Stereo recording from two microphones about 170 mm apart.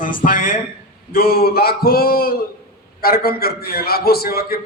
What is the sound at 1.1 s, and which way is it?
A man's voice, 65° left (ahead or behind).